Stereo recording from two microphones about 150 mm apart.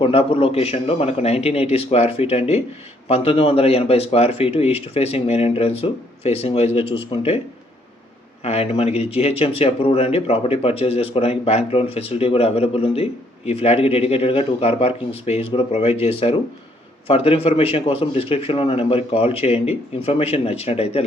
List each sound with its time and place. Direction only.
0.0 s a man's voice: 40° left (ahead or behind)
8.4 s a man's voice: 40° left (ahead or behind)